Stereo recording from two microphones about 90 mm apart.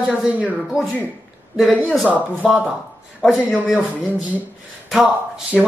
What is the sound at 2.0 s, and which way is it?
Speech, 15° right (ahead or behind).